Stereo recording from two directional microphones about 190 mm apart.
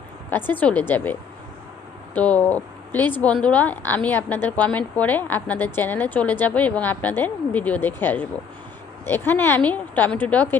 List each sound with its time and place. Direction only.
0.3 s a woman's voice: 10° left (ahead or behind)